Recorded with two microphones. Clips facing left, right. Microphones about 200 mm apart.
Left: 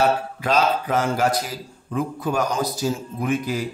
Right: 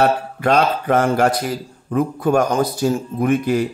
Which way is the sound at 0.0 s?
60° right (ahead or behind).